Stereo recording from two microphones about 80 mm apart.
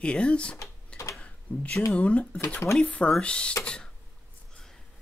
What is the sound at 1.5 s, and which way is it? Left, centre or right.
Speech, centre.